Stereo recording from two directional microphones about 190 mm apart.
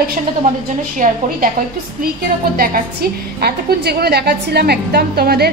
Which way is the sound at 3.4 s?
55° right (ahead or behind).